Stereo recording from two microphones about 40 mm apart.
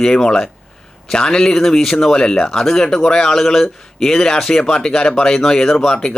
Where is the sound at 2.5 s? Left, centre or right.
Centre.